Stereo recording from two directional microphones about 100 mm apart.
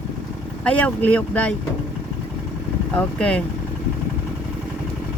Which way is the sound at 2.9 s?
10° left (ahead or behind).